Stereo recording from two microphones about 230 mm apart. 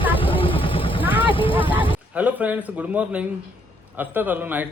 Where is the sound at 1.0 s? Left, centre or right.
Centre.